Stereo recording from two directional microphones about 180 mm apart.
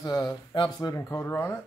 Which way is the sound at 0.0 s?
20° left (ahead or behind).